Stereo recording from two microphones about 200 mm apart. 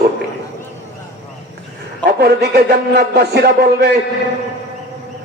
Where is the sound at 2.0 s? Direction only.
55° right (ahead or behind).